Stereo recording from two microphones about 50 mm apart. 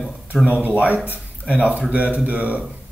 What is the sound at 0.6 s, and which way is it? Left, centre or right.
Speech, right.